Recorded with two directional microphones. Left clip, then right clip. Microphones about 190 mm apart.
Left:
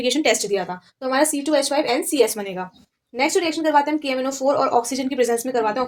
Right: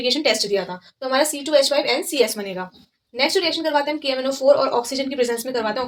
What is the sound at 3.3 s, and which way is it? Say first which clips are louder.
A woman's voice: left 2 dB; 45° left (ahead or behind).